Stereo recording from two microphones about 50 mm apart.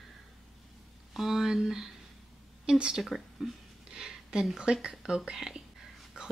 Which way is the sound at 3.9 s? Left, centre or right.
Centre.